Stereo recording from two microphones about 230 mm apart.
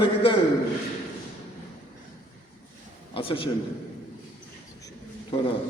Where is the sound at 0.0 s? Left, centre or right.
Left.